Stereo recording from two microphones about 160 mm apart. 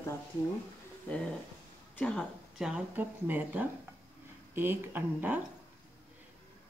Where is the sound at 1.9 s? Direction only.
5° left (ahead or behind).